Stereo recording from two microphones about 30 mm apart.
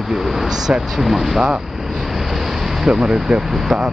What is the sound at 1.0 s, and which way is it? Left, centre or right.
Speech, centre.